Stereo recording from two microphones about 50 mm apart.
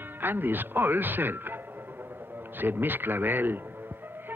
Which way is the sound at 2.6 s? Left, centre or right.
Right.